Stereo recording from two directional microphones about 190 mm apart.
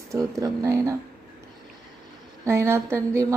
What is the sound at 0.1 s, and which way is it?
Speech, 15° right (ahead or behind).